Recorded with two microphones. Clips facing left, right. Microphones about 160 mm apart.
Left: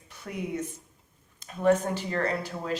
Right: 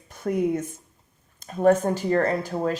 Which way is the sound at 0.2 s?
50° right (ahead or behind).